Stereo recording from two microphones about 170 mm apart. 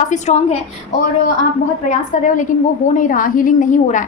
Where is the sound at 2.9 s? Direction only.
50° left (ahead or behind).